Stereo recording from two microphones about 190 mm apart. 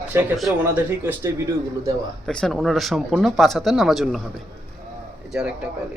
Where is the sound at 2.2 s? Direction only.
5° left (ahead or behind).